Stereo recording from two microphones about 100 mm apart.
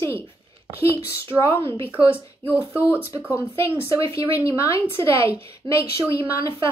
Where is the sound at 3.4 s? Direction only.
25° left (ahead or behind).